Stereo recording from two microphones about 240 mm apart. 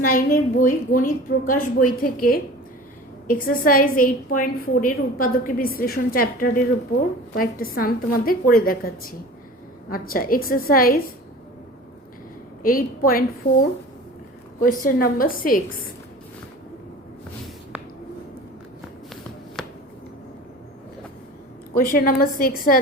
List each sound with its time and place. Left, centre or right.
0.0 s a woman's voice: left
12.6 s a woman's voice: left
21.8 s a woman's voice: left